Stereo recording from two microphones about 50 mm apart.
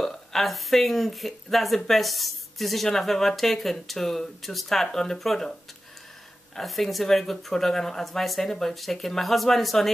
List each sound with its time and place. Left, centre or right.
0.0 s speech: centre
6.5 s speech: centre